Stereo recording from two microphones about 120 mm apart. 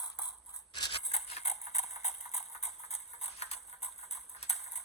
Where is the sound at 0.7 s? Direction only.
45° left (ahead or behind).